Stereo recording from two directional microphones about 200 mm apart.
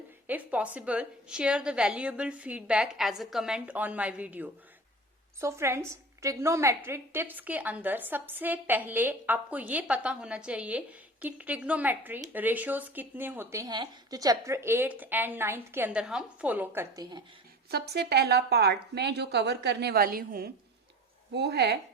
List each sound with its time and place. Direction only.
0.3 s a woman's voice: 5° right (ahead or behind)
17.7 s a woman's voice: 55° right (ahead or behind)